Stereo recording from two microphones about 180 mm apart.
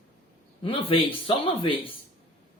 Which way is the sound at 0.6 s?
30° left (ahead or behind).